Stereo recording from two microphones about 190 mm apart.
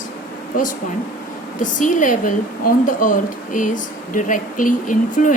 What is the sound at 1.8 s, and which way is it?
A woman's voice, 45° left (ahead or behind).